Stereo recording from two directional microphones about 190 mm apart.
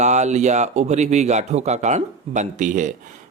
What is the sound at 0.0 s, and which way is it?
Speech, 35° right (ahead or behind).